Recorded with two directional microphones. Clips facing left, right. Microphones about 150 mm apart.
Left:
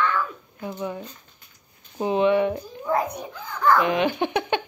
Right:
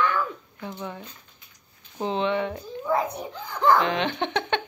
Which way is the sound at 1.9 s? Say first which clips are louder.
Left 5 dB; 10° left (ahead or behind).